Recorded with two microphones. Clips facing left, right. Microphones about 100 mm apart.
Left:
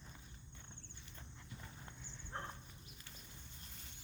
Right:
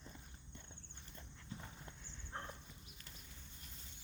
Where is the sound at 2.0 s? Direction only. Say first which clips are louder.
Left 2 dB; 5° left (ahead or behind).